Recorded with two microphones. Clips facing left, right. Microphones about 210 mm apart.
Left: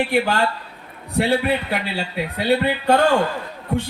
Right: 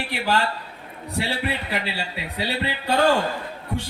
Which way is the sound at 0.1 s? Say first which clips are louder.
Left 5 dB; 55° left (ahead or behind).